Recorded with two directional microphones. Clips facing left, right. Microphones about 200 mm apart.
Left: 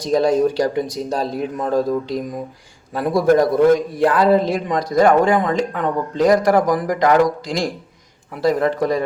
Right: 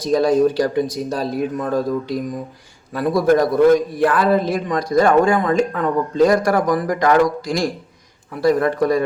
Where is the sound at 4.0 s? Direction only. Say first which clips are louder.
Left 2 dB; 25° left (ahead or behind).